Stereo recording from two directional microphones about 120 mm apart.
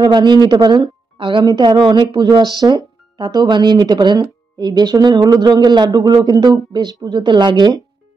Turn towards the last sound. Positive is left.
turn(degrees=-35)  # may be behind; listen again after turning